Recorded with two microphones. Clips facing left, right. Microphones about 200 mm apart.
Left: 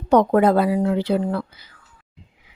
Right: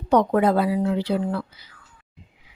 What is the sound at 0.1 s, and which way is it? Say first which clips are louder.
Speech: left 3 dB; 50° left (ahead or behind).